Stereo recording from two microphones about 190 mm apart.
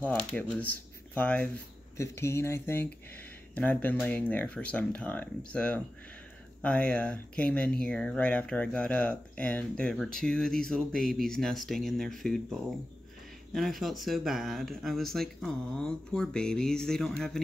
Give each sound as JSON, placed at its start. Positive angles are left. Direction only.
{"t": 0.0, "sound": "speech", "side_deg": 10}